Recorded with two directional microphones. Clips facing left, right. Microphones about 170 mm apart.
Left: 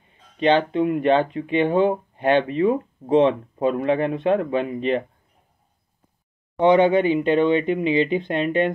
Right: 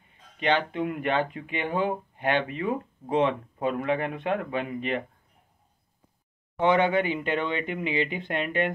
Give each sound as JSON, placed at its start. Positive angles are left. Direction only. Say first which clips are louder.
{"t": 0.4, "sound": "speech", "louder": "left 7 dB", "side_deg": 25}
{"t": 6.6, "sound": "speech", "louder": "left 7 dB", "side_deg": 20}